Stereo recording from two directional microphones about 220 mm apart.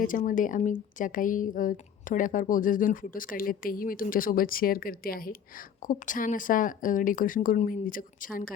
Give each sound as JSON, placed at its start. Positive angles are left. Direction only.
{"t": 0.0, "sound": "a woman's voice", "side_deg": 40}